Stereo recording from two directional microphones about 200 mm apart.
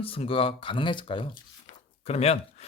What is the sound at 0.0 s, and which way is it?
Speech, 30° left (ahead or behind).